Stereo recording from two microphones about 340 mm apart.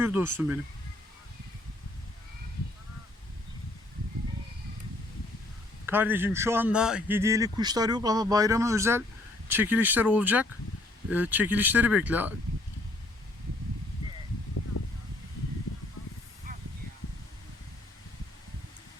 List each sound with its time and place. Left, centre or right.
0.0 s speech: centre
5.8 s a man's voice: centre